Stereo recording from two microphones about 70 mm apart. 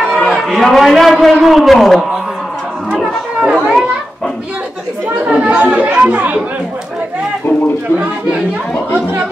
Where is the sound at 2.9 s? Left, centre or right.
Centre.